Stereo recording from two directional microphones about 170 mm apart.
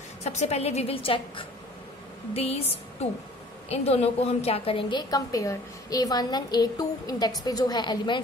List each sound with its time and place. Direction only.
0.2 s a woman's voice: 40° left (ahead or behind); by 8.2 s 25° left (ahead or behind)